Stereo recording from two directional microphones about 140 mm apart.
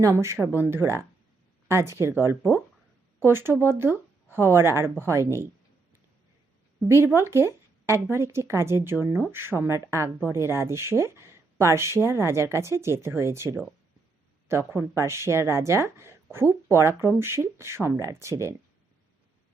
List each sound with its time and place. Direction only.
0.0 s speech: 20° right (ahead or behind)
6.8 s a woman's voice: 20° right (ahead or behind)